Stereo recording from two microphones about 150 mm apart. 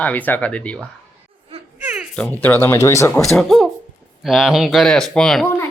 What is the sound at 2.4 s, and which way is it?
Speech, 10° left (ahead or behind).